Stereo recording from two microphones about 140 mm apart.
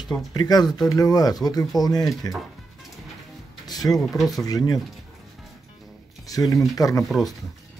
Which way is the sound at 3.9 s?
Centre (ahead or behind).